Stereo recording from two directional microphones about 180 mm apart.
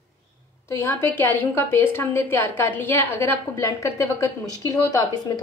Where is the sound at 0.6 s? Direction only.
15° left (ahead or behind).